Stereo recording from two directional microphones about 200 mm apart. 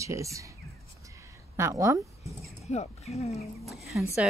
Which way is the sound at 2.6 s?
35° left (ahead or behind).